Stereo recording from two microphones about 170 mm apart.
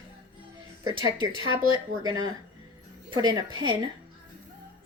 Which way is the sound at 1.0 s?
30° left (ahead or behind).